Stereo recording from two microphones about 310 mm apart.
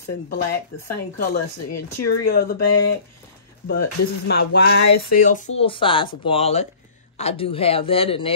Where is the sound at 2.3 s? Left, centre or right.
Left.